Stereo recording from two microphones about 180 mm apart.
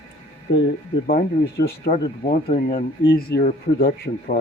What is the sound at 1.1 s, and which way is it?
Speech, 60° left (ahead or behind).